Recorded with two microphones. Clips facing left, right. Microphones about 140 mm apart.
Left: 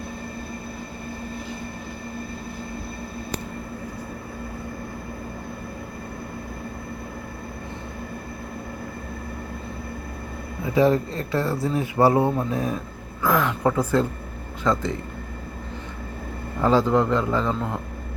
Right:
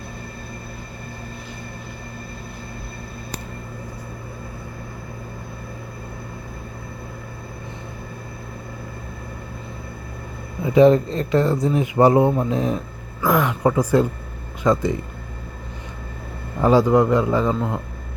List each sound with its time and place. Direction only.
10.7 s a man's voice: 20° right (ahead or behind)
16.6 s a man's voice: 15° right (ahead or behind)